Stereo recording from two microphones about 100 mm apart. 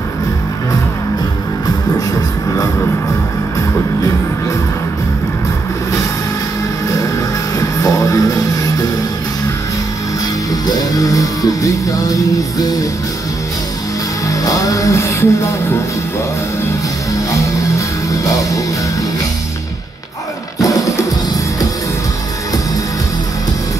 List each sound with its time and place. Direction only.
2.0 s music: 35° left (ahead or behind)
7.6 s music: 35° left (ahead or behind)
10.5 s music: 40° left (ahead or behind)
14.2 s music: 35° left (ahead or behind)
17.3 s music: 30° left (ahead or behind)
20.5 s music: 35° left (ahead or behind)